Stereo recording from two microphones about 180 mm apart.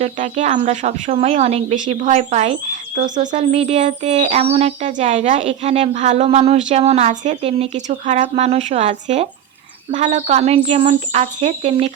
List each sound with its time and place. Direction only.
0.0 s speech: 40° right (ahead or behind)